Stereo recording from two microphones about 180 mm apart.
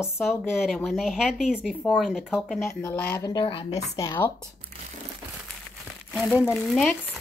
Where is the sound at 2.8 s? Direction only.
10° left (ahead or behind).